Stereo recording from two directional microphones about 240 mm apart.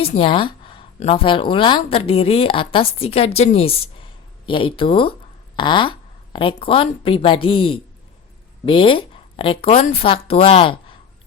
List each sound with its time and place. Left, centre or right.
0.0 s speech: left